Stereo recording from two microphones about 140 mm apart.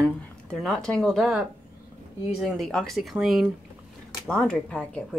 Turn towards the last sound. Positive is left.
turn(degrees=5)  # may be behind; listen again after turning